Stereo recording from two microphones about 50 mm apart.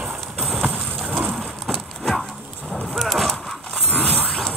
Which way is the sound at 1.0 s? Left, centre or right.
Right.